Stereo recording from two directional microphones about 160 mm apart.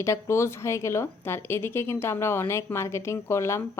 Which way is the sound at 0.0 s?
15° left (ahead or behind).